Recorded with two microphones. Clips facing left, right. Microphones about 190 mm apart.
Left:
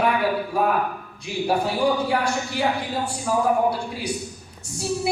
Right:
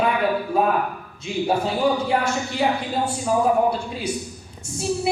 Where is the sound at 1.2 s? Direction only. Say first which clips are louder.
Right 1 dB; 20° right (ahead or behind).